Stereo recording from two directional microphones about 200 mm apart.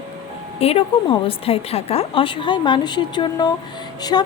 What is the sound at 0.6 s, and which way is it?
A woman's voice, 30° left (ahead or behind).